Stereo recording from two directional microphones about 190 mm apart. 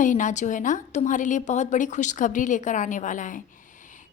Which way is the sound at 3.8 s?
40° left (ahead or behind).